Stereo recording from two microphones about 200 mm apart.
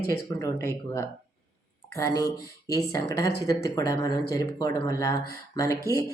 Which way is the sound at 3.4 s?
15° left (ahead or behind).